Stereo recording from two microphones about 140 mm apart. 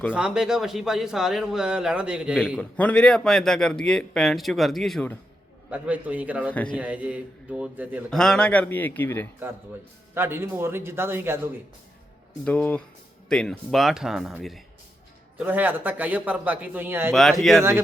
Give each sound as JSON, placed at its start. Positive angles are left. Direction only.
{"t": 0.1, "sound": "speech", "side_deg": -5}
{"t": 2.6, "sound": "speech", "side_deg": 10}
{"t": 5.7, "sound": "a man's voice", "side_deg": -10}
{"t": 6.5, "sound": "a man's voice", "side_deg": 10}
{"t": 6.7, "sound": "a man's voice", "side_deg": -10}
{"t": 8.1, "sound": "a man's voice", "side_deg": 5}
{"t": 10.2, "sound": "a man's voice", "side_deg": -15}
{"t": 12.5, "sound": "a man's voice", "side_deg": 10}
{"t": 15.4, "sound": "a man's voice", "side_deg": -10}
{"t": 17.1, "sound": "speech", "side_deg": 0}